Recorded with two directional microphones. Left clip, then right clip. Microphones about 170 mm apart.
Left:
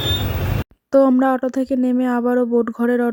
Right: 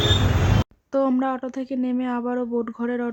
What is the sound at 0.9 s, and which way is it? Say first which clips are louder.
Speech: left 8 dB; 40° left (ahead or behind).